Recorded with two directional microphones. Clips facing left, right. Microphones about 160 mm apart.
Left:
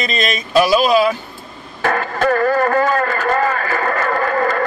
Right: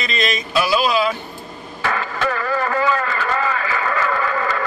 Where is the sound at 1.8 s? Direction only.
45° left (ahead or behind).